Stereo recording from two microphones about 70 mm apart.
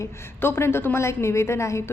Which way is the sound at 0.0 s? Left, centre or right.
Left.